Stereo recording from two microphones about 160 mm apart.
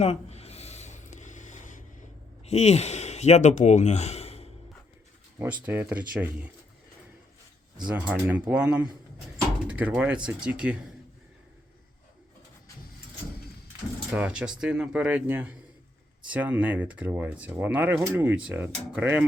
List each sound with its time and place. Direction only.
0.0 s a sound: 40° left (ahead or behind)
2.4 s speech: 40° left (ahead or behind)
5.4 s speech: 10° right (ahead or behind)
7.9 s speech: 10° right (ahead or behind)
14.1 s speech: 10° right (ahead or behind)